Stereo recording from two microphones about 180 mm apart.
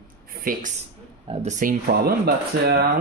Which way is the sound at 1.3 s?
40° right (ahead or behind).